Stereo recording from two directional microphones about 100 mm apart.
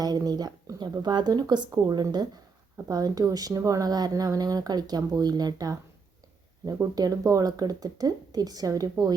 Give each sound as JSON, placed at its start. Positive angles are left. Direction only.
{"t": 0.0, "sound": "speech", "side_deg": -40}
{"t": 6.9, "sound": "speech", "side_deg": -40}